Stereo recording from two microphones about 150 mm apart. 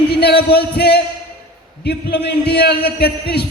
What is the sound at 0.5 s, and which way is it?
A man's voice, 90° left.